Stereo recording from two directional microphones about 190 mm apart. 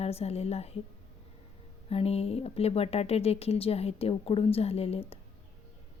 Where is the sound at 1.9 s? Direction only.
30° left (ahead or behind).